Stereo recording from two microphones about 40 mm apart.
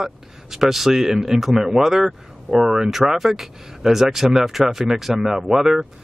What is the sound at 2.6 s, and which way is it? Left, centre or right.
Speech, centre.